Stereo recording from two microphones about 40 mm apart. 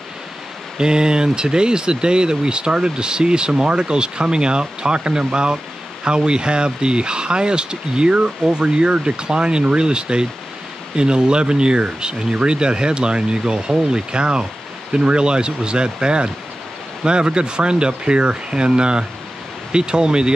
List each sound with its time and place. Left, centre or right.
0.7 s speech: right